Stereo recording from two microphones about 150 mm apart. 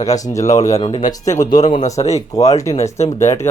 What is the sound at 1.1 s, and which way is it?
Speech, 20° left (ahead or behind).